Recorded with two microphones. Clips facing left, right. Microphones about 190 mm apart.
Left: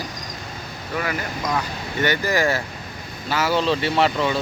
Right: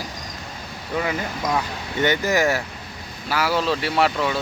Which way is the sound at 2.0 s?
20° right (ahead or behind).